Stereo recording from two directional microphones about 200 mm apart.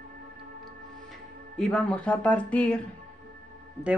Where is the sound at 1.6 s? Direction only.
5° left (ahead or behind).